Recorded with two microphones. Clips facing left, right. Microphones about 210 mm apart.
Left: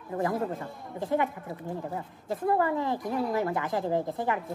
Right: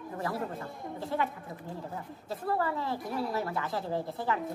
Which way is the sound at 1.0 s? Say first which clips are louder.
Left 5 dB; 15° left (ahead or behind).